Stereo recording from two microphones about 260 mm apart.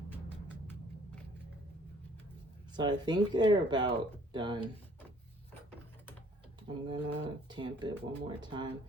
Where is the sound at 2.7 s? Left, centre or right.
Centre.